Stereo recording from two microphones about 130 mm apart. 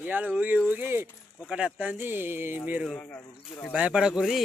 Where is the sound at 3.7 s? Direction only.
10° right (ahead or behind).